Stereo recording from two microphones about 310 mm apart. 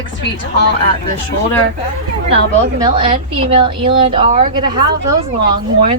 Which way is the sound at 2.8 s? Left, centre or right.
Centre.